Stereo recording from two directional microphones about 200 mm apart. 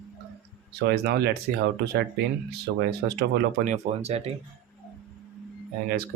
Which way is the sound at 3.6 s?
35° right (ahead or behind).